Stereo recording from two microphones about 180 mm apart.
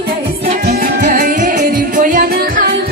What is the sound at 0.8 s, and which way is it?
Music, 50° right (ahead or behind).